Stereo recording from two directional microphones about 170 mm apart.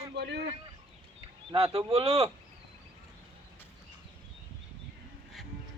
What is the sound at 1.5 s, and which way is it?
Speech, 35° right (ahead or behind).